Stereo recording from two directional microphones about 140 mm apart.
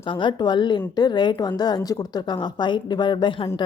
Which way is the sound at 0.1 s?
35° left (ahead or behind).